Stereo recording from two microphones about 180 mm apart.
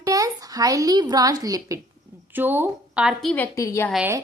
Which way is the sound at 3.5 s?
15° left (ahead or behind).